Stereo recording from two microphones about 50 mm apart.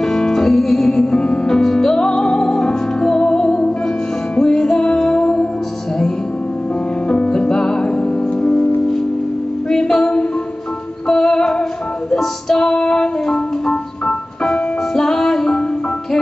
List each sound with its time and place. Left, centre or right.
0.0 s music: centre
7.1 s music: centre
9.7 s music: centre